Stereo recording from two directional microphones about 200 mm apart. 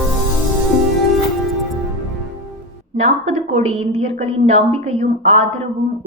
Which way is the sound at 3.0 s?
35° right (ahead or behind).